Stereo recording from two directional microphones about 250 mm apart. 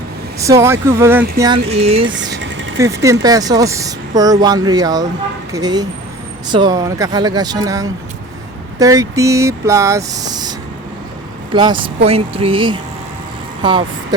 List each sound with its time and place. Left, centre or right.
0.3 s a woman's voice: centre
1.7 s speech: right
2.4 s vehicle: right
2.7 s a woman's voice: centre
11.5 s speech: centre